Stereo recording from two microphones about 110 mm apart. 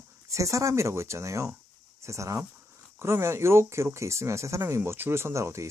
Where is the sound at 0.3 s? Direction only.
30° right (ahead or behind).